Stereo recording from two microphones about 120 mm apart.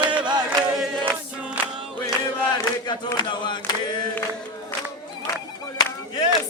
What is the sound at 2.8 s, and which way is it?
Chant, 40° left (ahead or behind).